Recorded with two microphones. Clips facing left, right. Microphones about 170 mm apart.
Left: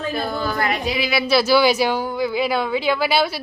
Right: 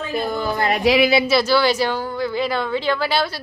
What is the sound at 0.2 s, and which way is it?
Speech, 20° right (ahead or behind).